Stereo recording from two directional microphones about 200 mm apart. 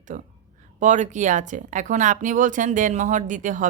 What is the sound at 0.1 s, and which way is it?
Speech, 40° right (ahead or behind).